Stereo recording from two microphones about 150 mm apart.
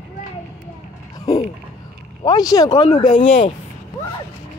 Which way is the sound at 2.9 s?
50° left (ahead or behind).